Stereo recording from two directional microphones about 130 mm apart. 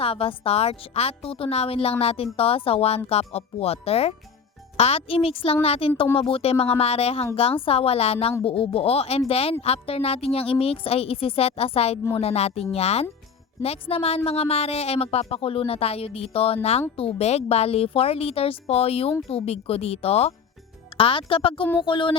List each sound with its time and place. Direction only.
0.0 s speech: 45° left (ahead or behind)